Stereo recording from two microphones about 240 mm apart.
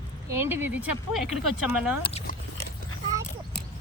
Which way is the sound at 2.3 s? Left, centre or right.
Left.